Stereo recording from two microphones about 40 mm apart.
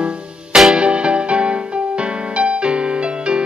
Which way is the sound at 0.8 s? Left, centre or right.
Right.